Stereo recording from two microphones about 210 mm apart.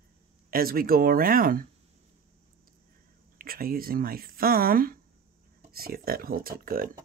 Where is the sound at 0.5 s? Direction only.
45° right (ahead or behind).